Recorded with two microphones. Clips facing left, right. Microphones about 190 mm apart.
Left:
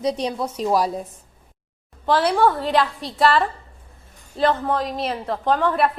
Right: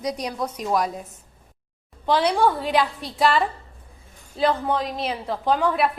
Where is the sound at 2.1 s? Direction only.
Centre (ahead or behind).